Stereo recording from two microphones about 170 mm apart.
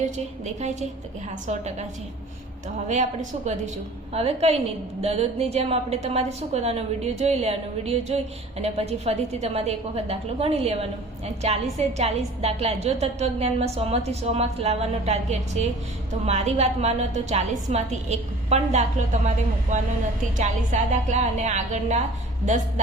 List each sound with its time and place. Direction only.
0.0 s a woman's voice: 40° right (ahead or behind)
2.9 s a woman's voice: 45° right (ahead or behind)
20.4 s a woman's voice: 45° right (ahead or behind)